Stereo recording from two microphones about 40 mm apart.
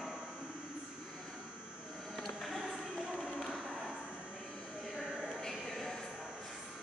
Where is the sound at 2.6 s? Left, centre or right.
Right.